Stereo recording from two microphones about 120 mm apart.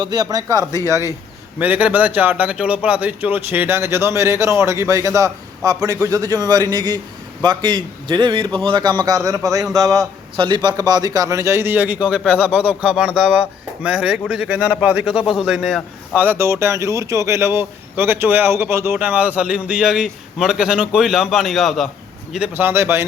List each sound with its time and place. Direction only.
0.0 s a man's voice: 35° right (ahead or behind)
1.5 s a man's voice: 15° right (ahead or behind); by 10.1 s 30° right (ahead or behind)
10.3 s a man's voice: 40° right (ahead or behind); by 15.8 s 5° right (ahead or behind)
16.1 s speech: 15° right (ahead or behind); by 21.8 s centre (ahead or behind)
22.5 s a man's voice: 20° right (ahead or behind)